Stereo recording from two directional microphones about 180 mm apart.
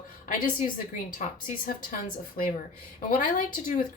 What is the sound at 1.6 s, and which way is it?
A woman's voice, 50° left (ahead or behind).